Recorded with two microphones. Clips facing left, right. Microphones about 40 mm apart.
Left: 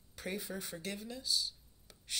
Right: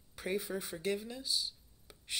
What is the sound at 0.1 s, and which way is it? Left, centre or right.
Speech, centre.